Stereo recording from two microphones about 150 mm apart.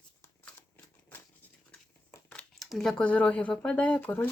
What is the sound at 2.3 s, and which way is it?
Speech, 5° left (ahead or behind).